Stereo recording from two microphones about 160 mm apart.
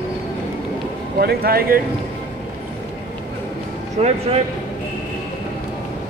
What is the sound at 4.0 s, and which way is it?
Speech, 40° right (ahead or behind).